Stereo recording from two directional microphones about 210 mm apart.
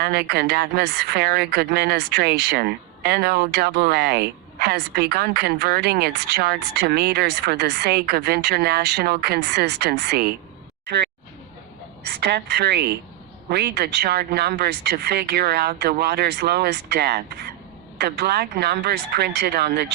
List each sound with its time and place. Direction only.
0.0 s speech: 50° right (ahead or behind)
12.2 s speech: 50° right (ahead or behind)